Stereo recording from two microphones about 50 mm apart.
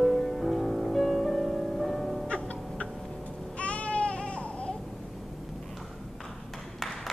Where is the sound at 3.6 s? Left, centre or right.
Left.